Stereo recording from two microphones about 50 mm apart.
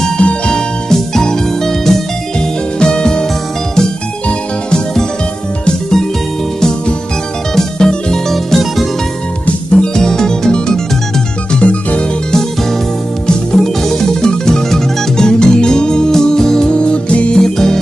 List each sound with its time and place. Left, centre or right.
0.2 s music: centre
4.3 s music: centre
7.5 s music: centre
9.7 s music: centre
11.6 s music: left
13.5 s music: centre
17.4 s music: centre